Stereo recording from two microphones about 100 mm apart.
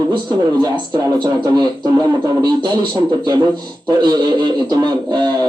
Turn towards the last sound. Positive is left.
turn(degrees=-45)  # may be behind; listen again after turning